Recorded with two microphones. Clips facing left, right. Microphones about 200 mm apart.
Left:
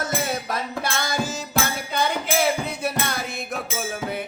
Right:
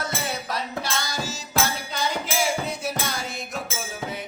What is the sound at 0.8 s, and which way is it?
Music, 55° left (ahead or behind).